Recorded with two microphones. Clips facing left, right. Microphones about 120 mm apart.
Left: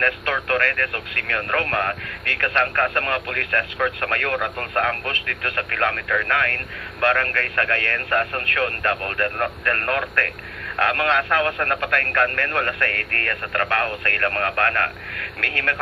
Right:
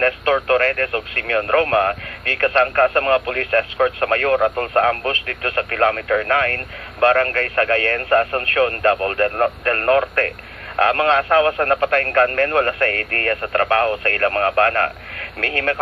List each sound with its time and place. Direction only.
0.0 s speech: 40° right (ahead or behind)